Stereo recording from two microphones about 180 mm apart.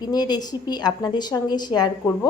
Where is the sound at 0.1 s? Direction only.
20° left (ahead or behind).